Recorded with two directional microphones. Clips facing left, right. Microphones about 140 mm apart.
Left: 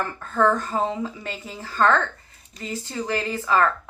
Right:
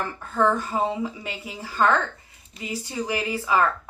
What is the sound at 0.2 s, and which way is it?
A woman's voice, 15° right (ahead or behind).